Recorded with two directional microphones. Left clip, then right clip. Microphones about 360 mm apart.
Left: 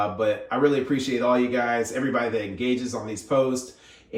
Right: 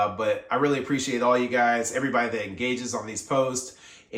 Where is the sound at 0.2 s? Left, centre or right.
Centre.